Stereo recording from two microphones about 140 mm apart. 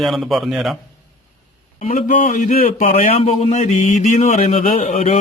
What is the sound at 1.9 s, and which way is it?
A man's voice, 65° left (ahead or behind).